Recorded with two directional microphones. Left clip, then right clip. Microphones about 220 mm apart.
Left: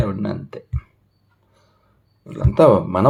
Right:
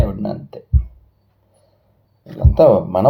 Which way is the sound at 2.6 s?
20° left (ahead or behind).